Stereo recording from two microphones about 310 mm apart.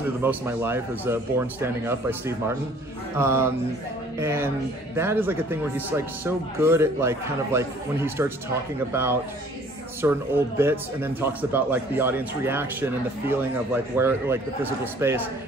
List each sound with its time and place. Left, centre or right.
0.0 s speech: centre
4.9 s speech: centre